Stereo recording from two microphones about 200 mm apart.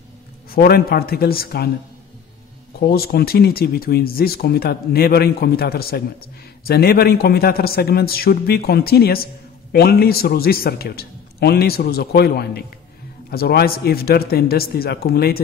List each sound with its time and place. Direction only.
0.5 s speech: 50° left (ahead or behind)
2.8 s speech: 50° left (ahead or behind)